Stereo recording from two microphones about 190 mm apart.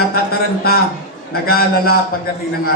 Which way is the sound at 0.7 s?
55° left (ahead or behind).